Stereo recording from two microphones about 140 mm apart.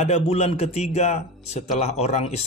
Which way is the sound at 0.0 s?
50° left (ahead or behind).